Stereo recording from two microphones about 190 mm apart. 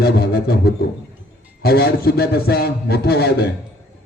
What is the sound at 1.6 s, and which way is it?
A man's voice, 55° left (ahead or behind).